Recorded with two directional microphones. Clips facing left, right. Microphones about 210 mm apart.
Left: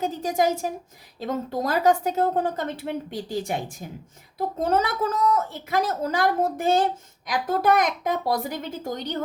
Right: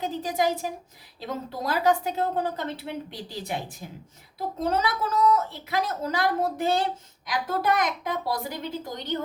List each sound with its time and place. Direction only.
0.0 s a woman's voice: 45° left (ahead or behind)